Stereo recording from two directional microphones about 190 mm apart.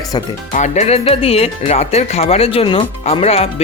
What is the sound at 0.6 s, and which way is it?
Speech, 35° left (ahead or behind).